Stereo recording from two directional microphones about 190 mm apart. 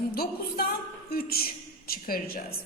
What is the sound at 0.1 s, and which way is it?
A woman's voice, 55° left (ahead or behind).